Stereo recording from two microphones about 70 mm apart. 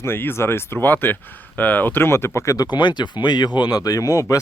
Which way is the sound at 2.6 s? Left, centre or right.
Left.